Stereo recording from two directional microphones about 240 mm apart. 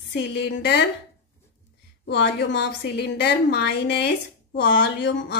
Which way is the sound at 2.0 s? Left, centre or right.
Left.